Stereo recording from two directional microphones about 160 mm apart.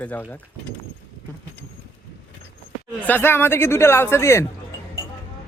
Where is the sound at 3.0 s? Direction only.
10° left (ahead or behind).